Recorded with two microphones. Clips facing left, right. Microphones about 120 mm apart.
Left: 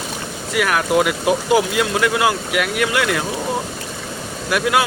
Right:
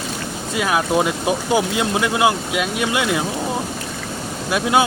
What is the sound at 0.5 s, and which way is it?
Speech, 20° right (ahead or behind).